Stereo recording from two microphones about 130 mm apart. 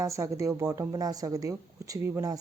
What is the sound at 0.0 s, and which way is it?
Speech, 25° right (ahead or behind).